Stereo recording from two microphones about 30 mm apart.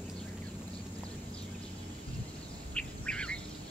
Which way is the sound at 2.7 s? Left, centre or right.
Left.